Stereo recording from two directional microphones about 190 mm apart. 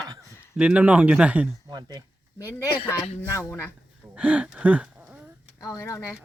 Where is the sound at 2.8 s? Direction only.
10° left (ahead or behind).